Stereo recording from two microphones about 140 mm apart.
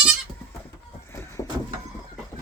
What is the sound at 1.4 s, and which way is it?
Vehicle, 20° left (ahead or behind).